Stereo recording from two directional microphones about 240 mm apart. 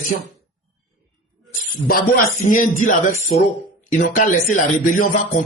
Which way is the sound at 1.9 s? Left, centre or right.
Left.